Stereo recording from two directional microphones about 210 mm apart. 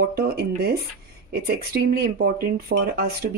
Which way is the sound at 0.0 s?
50° right (ahead or behind).